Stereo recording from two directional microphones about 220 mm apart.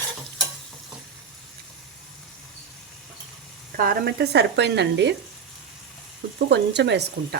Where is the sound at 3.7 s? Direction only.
40° right (ahead or behind).